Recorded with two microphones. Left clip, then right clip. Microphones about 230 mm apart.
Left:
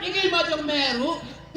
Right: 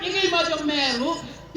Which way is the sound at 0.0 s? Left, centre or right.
Left.